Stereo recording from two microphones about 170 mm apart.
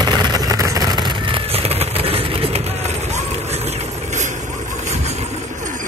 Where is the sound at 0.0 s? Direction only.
25° right (ahead or behind).